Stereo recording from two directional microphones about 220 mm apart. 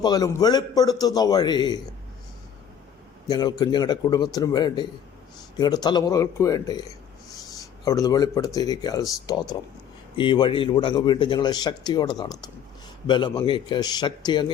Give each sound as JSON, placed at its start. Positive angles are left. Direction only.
{"t": 0.0, "sound": "a man's voice", "side_deg": 15}
{"t": 3.2, "sound": "a man's voice", "side_deg": 20}